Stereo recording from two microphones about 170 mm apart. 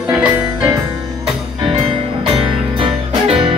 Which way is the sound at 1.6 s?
30° right (ahead or behind).